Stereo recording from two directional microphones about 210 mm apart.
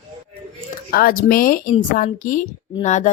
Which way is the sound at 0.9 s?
45° left (ahead or behind).